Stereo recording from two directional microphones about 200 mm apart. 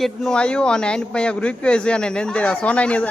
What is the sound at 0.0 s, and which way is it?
Speech, 5° left (ahead or behind).